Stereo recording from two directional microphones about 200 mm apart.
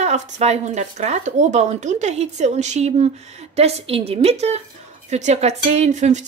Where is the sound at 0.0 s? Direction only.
35° right (ahead or behind).